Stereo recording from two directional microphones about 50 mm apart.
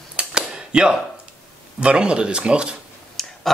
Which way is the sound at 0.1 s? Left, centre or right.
Centre.